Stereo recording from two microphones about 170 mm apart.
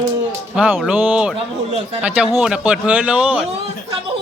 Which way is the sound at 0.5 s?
5° right (ahead or behind).